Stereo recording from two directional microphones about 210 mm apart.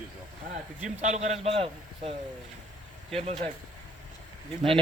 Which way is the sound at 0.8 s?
35° right (ahead or behind).